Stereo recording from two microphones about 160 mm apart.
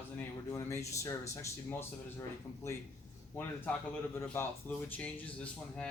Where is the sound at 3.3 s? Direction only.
10° left (ahead or behind).